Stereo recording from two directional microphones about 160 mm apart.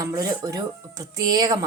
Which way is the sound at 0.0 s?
20° right (ahead or behind).